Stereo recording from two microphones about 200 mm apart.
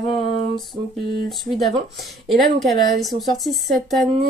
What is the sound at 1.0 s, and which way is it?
Speech, 55° right (ahead or behind).